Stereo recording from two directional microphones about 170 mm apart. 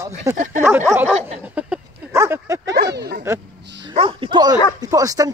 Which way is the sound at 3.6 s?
90° right.